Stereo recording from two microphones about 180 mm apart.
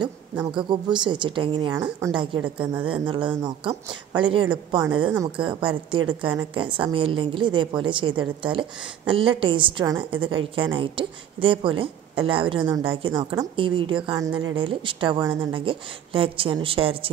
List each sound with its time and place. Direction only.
0.5 s a woman's voice: 25° right (ahead or behind)
2.0 s a woman's voice: 15° right (ahead or behind)
2.9 s a woman's voice: 25° right (ahead or behind)
14.5 s a woman's voice: 30° right (ahead or behind)